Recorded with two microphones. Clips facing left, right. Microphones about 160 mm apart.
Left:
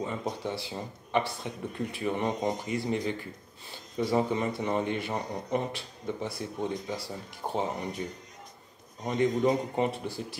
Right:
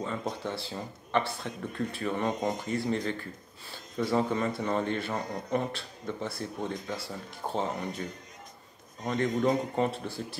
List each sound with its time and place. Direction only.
0.0 s speech: 15° left (ahead or behind)